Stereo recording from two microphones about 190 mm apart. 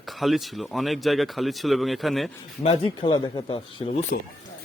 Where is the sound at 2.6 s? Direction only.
30° left (ahead or behind).